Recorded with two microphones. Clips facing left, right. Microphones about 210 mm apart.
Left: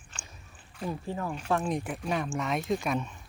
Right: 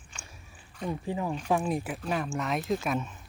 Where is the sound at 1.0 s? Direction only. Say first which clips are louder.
Right 2 dB; 15° right (ahead or behind).